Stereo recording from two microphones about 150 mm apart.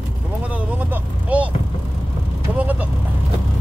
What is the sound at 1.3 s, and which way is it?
Vehicle, 10° right (ahead or behind).